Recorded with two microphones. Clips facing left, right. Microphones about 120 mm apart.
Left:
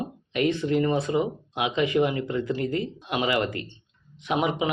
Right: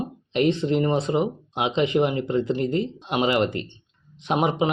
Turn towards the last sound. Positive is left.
turn(degrees=-30)  # may be behind; listen again after turning